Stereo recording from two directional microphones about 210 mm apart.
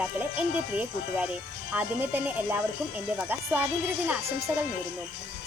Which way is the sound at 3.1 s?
5° right (ahead or behind).